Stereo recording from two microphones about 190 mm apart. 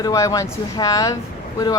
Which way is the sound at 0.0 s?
20° left (ahead or behind).